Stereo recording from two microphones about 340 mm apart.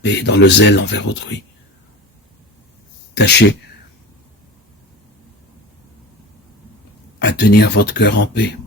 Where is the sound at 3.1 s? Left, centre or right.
Left.